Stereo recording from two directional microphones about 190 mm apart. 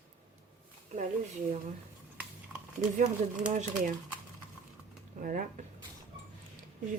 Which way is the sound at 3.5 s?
40° right (ahead or behind).